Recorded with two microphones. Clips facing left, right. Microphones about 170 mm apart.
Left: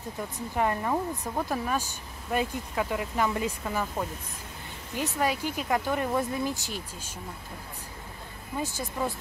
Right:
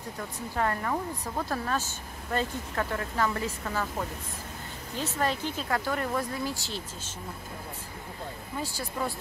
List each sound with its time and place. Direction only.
0.6 s speech: 15° left (ahead or behind)
4.9 s speech: 15° left (ahead or behind)
8.6 s speech: 20° left (ahead or behind)